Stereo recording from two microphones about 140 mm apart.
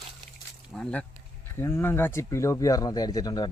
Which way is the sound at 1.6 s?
15° left (ahead or behind).